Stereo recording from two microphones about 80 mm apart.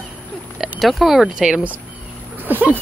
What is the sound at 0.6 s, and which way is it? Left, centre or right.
Speech, centre.